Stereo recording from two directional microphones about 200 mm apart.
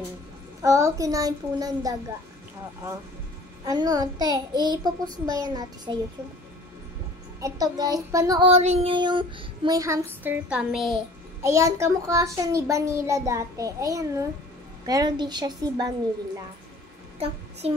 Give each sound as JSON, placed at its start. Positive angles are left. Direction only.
{"t": 0.6, "sound": "a child's voice", "side_deg": -15}
{"t": 3.6, "sound": "child singing", "side_deg": -20}
{"t": 7.3, "sound": "a child's voice", "side_deg": -15}
{"t": 8.5, "sound": "child singing", "side_deg": -30}
{"t": 11.4, "sound": "a child's voice", "side_deg": -15}
{"t": 14.9, "sound": "child singing", "side_deg": -20}
{"t": 17.2, "sound": "music", "side_deg": -30}